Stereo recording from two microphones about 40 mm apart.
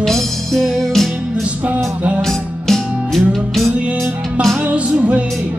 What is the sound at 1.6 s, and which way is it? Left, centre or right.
Music, right.